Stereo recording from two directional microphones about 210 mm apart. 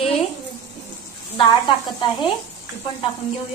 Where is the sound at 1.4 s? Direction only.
20° left (ahead or behind).